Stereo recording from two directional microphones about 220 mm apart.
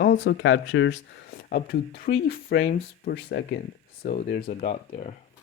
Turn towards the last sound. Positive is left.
turn(degrees=30)  # may be behind; listen again after turning